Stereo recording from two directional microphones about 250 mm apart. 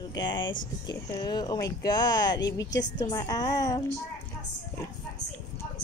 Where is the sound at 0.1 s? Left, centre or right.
Centre.